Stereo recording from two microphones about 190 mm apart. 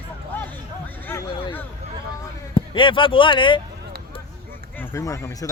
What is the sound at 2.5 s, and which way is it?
Speech, 25° left (ahead or behind).